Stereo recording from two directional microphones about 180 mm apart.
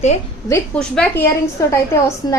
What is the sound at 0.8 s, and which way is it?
A woman's voice, 5° left (ahead or behind).